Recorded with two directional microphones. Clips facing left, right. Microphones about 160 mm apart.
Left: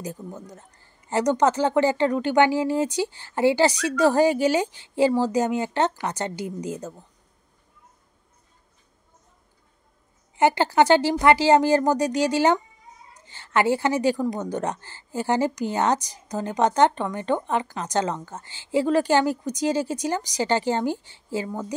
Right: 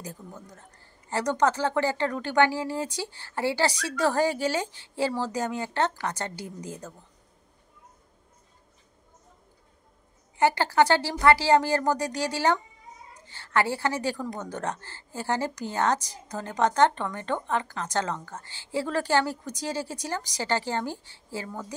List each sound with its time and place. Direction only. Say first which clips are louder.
0.0 s a woman's voice: left 7 dB; 20° left (ahead or behind)
10.3 s a woman's voice: left 3 dB; 20° left (ahead or behind)